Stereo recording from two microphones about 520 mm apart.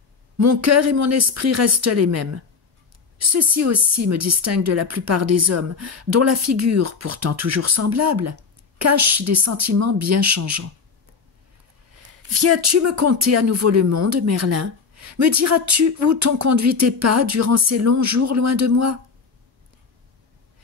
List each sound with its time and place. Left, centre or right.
0.4 s speech: right
12.1 s speech: right